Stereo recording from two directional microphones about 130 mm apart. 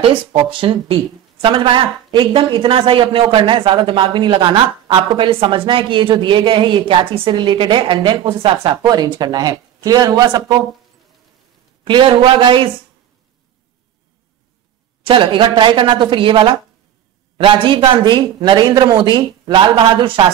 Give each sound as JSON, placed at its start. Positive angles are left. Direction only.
{"t": 0.0, "sound": "speech", "side_deg": -40}
{"t": 11.8, "sound": "speech", "side_deg": -40}
{"t": 15.0, "sound": "speech", "side_deg": -40}